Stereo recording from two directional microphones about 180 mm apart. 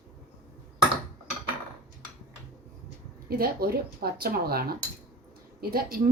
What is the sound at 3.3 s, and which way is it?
A woman's voice, 55° right (ahead or behind).